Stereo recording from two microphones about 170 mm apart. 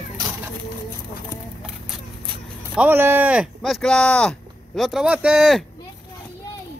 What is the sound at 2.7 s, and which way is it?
Speech, 10° right (ahead or behind).